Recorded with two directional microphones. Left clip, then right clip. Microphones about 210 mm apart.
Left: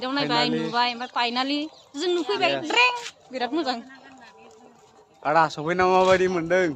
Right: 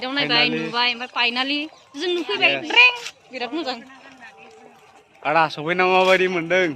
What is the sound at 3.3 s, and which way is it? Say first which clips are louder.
Speech: left 1 dB; 35° left (ahead or behind).